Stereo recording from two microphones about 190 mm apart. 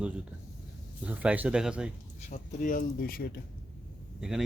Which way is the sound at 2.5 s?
45° left (ahead or behind).